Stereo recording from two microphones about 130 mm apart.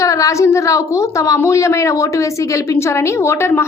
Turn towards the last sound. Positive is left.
turn(degrees=20)  # may be behind; listen again after turning